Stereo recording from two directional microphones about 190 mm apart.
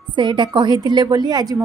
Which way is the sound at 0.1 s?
25° right (ahead or behind).